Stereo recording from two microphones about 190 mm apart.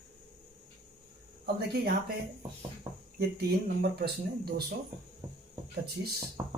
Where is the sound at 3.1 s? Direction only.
55° right (ahead or behind).